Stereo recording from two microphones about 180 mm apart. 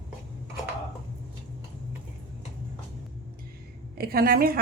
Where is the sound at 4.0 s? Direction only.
55° right (ahead or behind).